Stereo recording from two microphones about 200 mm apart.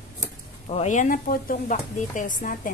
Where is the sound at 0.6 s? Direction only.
35° left (ahead or behind).